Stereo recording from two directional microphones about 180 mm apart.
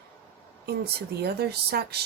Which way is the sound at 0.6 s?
60° right (ahead or behind).